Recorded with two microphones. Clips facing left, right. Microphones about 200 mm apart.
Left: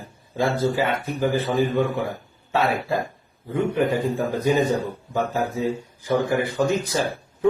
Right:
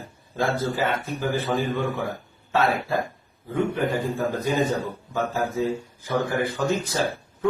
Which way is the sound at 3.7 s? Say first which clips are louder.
Left 3 dB; 15° left (ahead or behind).